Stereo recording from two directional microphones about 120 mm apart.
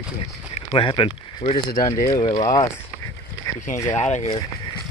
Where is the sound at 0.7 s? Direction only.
45° left (ahead or behind).